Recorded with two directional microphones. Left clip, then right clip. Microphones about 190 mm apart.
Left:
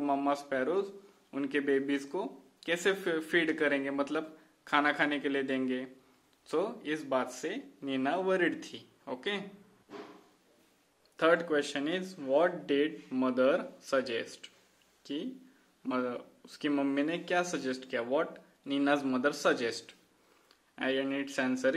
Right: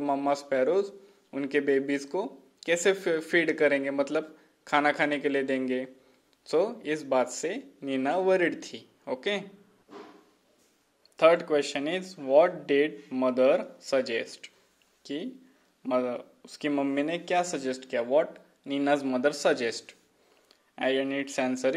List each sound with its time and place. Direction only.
0.0 s a man's voice: 15° right (ahead or behind)
11.1 s a man's voice: 20° right (ahead or behind)